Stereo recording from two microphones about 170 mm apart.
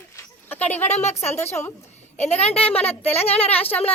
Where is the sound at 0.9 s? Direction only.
40° left (ahead or behind).